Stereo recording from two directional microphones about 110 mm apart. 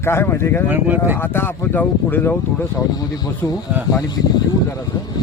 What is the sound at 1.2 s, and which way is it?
Speech, 20° left (ahead or behind).